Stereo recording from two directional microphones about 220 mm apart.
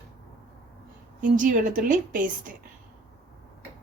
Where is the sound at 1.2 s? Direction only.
35° right (ahead or behind).